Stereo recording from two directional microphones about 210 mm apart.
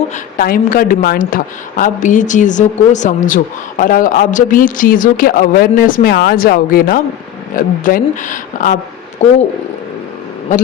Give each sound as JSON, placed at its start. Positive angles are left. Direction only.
{"t": 0.3, "sound": "a woman's voice", "side_deg": 40}